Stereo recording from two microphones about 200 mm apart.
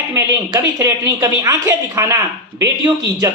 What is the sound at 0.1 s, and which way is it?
A man's voice, 15° right (ahead or behind).